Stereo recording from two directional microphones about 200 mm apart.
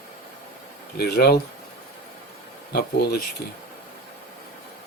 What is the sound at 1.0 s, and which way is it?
Speech, 50° left (ahead or behind).